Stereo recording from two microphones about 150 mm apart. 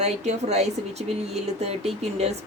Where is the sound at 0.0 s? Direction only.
45° right (ahead or behind).